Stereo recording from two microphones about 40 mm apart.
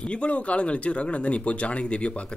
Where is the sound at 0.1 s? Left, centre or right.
Left.